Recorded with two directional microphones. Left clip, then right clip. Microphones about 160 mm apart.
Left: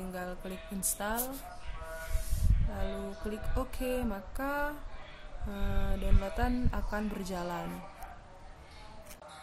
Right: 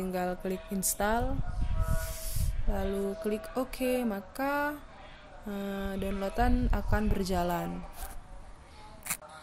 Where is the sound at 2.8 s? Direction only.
35° right (ahead or behind).